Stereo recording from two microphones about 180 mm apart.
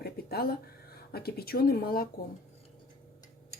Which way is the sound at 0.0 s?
60° left (ahead or behind).